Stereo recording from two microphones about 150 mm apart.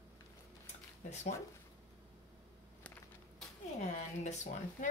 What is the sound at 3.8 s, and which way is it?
Speech, 50° left (ahead or behind).